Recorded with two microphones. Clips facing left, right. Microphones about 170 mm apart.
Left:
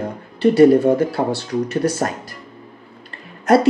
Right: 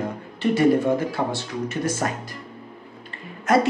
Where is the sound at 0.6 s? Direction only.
35° left (ahead or behind).